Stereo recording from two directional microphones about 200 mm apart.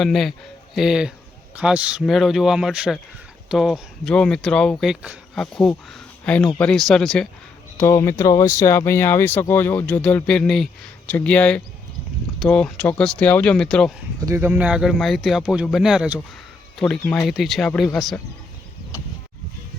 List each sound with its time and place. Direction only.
0.0 s speech: centre (ahead or behind)
7.8 s speech: 15° left (ahead or behind)
14.3 s speech: 10° right (ahead or behind)